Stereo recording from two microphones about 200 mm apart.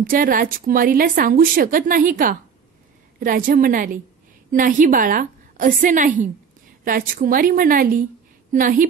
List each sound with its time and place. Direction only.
0.1 s a woman's voice: 45° right (ahead or behind)